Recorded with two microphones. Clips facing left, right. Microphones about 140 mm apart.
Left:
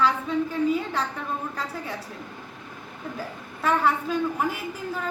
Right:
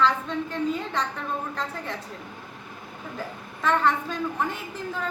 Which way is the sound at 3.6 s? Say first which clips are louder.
Even; 5° left (ahead or behind).